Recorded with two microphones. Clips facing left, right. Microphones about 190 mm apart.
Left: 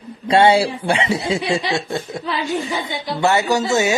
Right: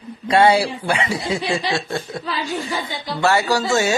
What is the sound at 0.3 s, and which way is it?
Speech, 25° left (ahead or behind).